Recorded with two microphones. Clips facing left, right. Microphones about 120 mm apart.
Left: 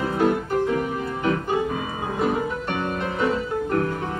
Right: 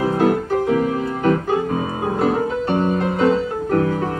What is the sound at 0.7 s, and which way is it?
Music, 45° right (ahead or behind).